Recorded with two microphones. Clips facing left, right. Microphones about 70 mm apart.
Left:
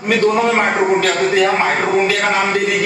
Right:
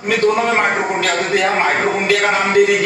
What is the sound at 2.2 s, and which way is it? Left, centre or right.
Speech, right.